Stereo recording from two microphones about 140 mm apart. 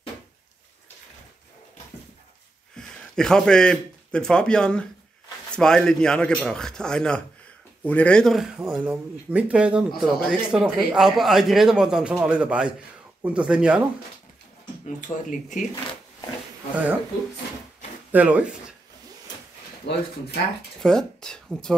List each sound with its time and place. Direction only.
2.7 s speech: 5° left (ahead or behind)
15.0 s speech: 65° left (ahead or behind)
16.7 s speech: 10° right (ahead or behind)
18.1 s speech: 10° right (ahead or behind)
20.8 s speech: 5° left (ahead or behind)